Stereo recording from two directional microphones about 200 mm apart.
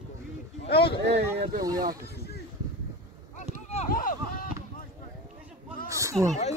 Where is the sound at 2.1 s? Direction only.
55° left (ahead or behind).